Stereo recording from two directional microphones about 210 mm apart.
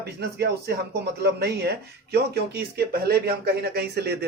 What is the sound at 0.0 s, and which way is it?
A man's voice, 50° right (ahead or behind).